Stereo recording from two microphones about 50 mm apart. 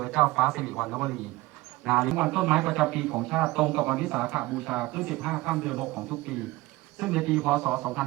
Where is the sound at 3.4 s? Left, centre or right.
Centre.